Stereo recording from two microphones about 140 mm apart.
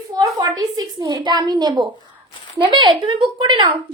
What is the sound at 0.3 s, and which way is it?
A woman's voice, 25° right (ahead or behind).